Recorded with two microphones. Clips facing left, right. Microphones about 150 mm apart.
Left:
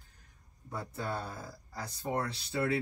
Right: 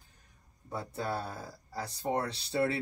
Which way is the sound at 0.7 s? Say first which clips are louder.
Right 2 dB; 30° right (ahead or behind).